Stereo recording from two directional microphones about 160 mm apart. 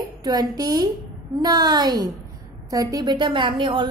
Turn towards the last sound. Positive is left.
turn(degrees=-30)  # may be behind; listen again after turning